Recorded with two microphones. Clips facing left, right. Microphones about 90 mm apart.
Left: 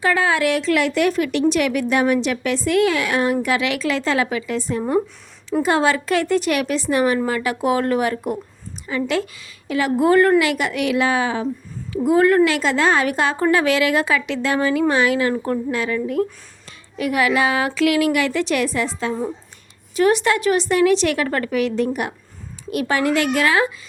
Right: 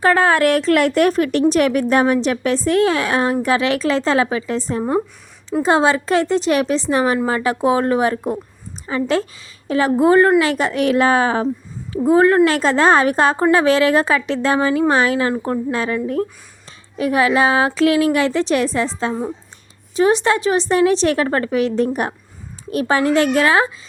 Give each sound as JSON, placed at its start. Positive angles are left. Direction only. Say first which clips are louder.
{"t": 0.0, "sound": "a woman's voice", "louder": "right 4 dB", "side_deg": -45}
{"t": 4.8, "sound": "a woman's voice", "louder": "right 1 dB", "side_deg": -25}
{"t": 12.0, "sound": "a woman's voice", "louder": "right 2 dB", "side_deg": -30}
{"t": 17.0, "sound": "a woman's voice", "louder": "right 3 dB", "side_deg": -30}